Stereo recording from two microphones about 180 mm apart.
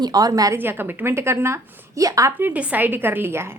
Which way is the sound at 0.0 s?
20° right (ahead or behind).